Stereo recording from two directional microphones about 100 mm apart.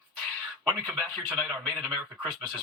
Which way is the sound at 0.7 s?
15° left (ahead or behind).